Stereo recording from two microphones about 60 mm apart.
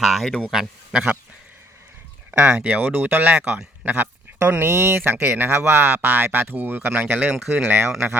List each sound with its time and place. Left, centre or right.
0.0 s speech: centre
2.4 s speech: centre; by 4.9 s right
4.9 s speech: right